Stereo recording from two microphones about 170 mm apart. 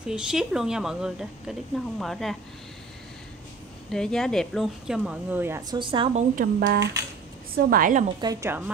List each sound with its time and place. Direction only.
0.0 s a woman's voice: 5° right (ahead or behind)
3.9 s a woman's voice: 5° left (ahead or behind); by 5.6 s 10° right (ahead or behind)
5.7 s a woman's voice: 30° right (ahead or behind)
6.1 s a woman's voice: 55° right (ahead or behind)
8.2 s speech: 20° right (ahead or behind)